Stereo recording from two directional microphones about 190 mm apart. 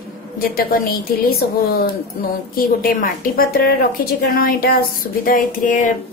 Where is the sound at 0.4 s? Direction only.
50° left (ahead or behind).